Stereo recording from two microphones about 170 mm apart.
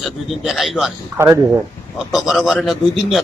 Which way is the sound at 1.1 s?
15° right (ahead or behind).